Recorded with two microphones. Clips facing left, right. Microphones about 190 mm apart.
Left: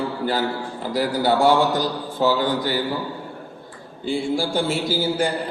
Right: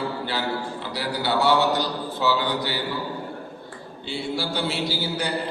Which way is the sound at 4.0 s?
50° left (ahead or behind).